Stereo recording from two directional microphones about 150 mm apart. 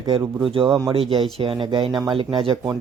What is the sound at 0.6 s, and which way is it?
Speech, 20° right (ahead or behind).